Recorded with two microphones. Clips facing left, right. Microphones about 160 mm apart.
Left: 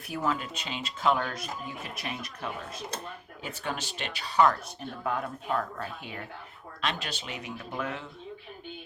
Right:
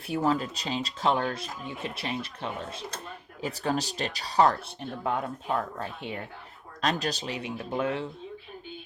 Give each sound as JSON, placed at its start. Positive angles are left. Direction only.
{"t": 0.1, "sound": "speech", "side_deg": -30}
{"t": 6.8, "sound": "speech", "side_deg": -40}